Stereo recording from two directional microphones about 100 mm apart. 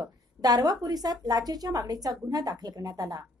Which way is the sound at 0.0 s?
40° right (ahead or behind).